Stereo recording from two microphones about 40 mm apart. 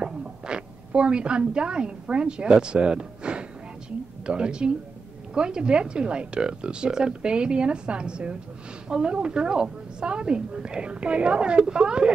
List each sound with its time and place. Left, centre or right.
0.0 s a woman's voice: right